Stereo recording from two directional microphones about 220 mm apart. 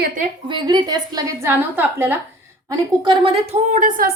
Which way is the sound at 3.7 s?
40° right (ahead or behind).